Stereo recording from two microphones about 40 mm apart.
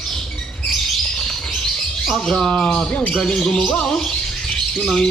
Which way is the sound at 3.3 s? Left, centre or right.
Centre.